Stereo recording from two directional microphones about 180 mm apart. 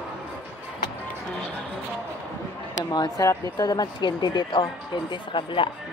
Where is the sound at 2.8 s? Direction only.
20° left (ahead or behind).